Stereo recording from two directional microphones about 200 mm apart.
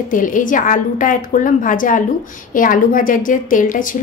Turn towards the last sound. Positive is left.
turn(degrees=40)  # may be behind; listen again after turning